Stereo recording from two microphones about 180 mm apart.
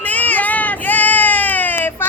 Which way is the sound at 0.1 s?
10° left (ahead or behind).